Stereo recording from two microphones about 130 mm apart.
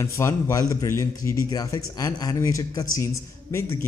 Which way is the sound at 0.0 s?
25° left (ahead or behind).